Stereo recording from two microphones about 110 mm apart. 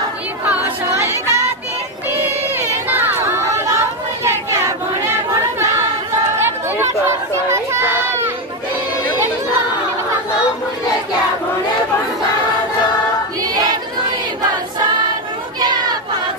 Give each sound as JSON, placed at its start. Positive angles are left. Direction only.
{"t": 0.9, "sound": "music", "side_deg": -25}
{"t": 2.9, "sound": "chatter", "side_deg": -20}
{"t": 6.3, "sound": "chatter", "side_deg": -25}
{"t": 7.4, "sound": "a sound", "side_deg": -25}
{"t": 13.4, "sound": "choir", "side_deg": -35}
{"t": 15.6, "sound": "a sound", "side_deg": -40}